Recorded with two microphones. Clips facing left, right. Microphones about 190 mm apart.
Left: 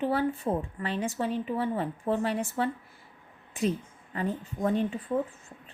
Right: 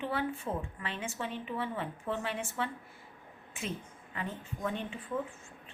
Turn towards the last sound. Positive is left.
turn(degrees=40)  # may be behind; listen again after turning